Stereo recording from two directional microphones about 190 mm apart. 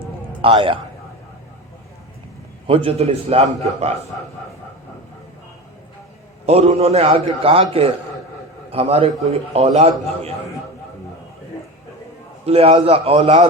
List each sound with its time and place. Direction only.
0.4 s a man's voice: 30° right (ahead or behind)
2.6 s a man's voice: 30° right (ahead or behind)
6.4 s a man's voice: 35° right (ahead or behind)
12.5 s a man's voice: 30° right (ahead or behind)